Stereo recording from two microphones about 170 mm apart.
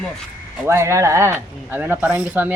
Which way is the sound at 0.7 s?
15° right (ahead or behind).